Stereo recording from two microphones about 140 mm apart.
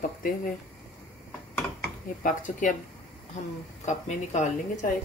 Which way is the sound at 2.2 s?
70° left (ahead or behind).